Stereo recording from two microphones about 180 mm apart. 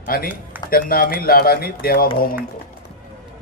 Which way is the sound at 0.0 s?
55° left (ahead or behind).